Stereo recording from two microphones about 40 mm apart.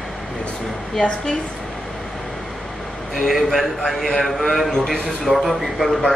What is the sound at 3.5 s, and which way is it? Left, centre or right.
A man's voice, centre.